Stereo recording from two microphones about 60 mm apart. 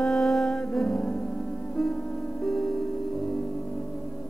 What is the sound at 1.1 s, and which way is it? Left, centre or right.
Music, centre.